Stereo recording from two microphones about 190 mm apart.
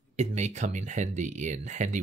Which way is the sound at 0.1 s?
35° right (ahead or behind).